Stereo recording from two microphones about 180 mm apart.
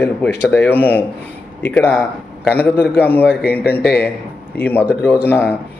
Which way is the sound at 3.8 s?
60° left (ahead or behind).